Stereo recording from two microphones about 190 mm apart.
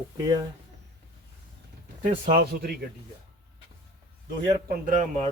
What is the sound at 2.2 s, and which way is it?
Speech, 50° right (ahead or behind).